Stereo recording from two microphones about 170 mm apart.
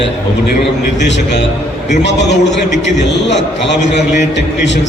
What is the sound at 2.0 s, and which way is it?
A man's voice, 90° left.